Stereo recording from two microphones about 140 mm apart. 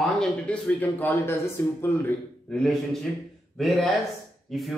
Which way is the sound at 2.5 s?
5° left (ahead or behind).